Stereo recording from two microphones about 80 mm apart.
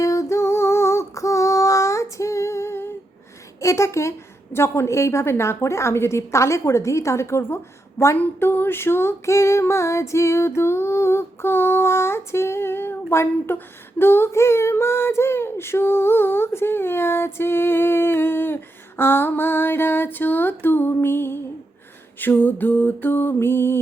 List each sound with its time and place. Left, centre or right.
0.0 s female singing: left
3.6 s a woman's voice: left
14.0 s child singing: left